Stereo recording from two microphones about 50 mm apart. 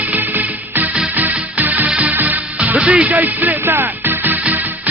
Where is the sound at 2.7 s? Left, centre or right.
Right.